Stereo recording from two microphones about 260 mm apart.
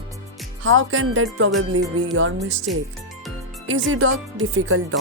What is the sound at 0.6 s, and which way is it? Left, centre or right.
Speech, right.